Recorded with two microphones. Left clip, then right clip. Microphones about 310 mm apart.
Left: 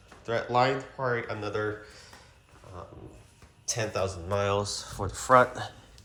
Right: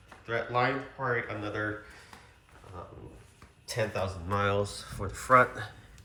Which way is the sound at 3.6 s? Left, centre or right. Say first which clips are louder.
Left 2 dB; centre.